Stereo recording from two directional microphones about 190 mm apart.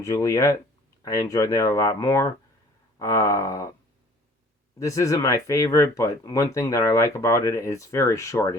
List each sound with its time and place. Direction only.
0.0 s speech: 15° left (ahead or behind)
4.8 s speech: 15° left (ahead or behind)